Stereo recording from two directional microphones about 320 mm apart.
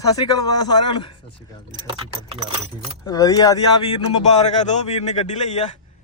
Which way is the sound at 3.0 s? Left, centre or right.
Centre.